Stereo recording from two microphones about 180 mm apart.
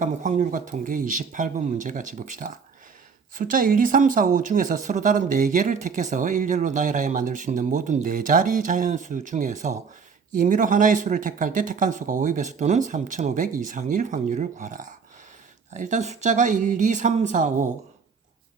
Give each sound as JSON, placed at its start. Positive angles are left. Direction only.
{"t": 0.0, "sound": "speech", "side_deg": -45}